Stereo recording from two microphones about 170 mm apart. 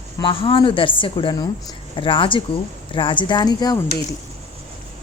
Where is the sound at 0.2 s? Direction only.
30° left (ahead or behind).